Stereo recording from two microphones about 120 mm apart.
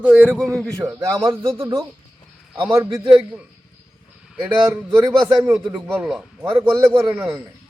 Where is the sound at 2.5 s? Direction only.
10° right (ahead or behind).